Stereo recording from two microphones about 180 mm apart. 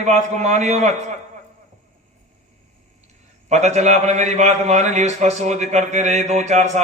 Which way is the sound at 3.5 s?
40° right (ahead or behind).